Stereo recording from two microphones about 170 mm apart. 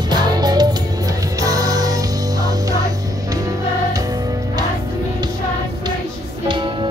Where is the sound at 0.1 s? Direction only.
25° right (ahead or behind).